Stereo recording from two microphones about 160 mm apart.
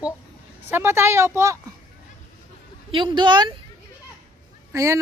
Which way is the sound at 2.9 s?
30° right (ahead or behind).